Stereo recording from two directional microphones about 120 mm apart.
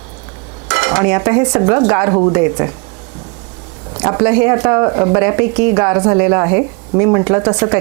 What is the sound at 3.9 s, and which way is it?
Speech, 25° right (ahead or behind).